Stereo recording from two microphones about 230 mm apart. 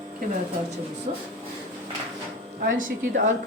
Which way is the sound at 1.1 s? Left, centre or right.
Right.